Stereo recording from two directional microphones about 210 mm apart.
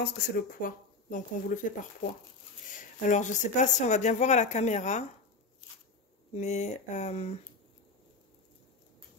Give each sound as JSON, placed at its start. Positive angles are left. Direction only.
{"t": 0.0, "sound": "speech", "side_deg": 45}
{"t": 3.1, "sound": "speech", "side_deg": 35}
{"t": 6.3, "sound": "speech", "side_deg": 30}